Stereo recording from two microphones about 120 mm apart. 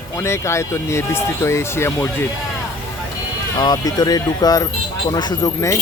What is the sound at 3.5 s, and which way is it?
Speech, 35° left (ahead or behind).